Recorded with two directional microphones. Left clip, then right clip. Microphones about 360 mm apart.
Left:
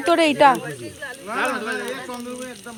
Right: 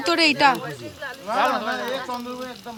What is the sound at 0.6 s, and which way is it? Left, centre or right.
Speech, right.